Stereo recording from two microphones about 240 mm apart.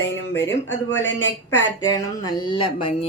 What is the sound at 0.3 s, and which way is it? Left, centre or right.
Speech, centre.